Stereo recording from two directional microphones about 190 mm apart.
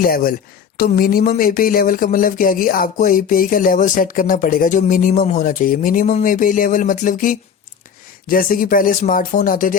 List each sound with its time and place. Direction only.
0.0 s speech: 50° left (ahead or behind)